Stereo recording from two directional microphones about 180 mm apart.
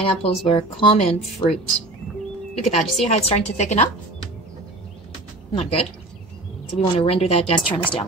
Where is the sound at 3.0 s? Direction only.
35° left (ahead or behind).